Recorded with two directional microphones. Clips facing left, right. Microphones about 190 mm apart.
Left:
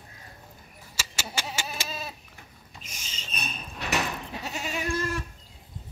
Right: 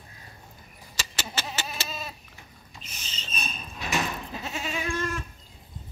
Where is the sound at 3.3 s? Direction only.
65° left (ahead or behind).